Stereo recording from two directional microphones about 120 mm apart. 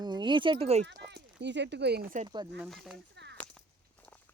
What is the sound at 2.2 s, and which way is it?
Speech, 35° right (ahead or behind).